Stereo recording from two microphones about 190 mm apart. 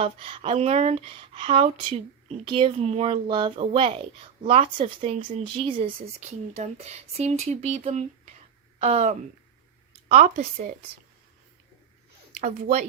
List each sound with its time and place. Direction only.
0.0 s speech: 30° right (ahead or behind)
12.4 s speech: 45° right (ahead or behind)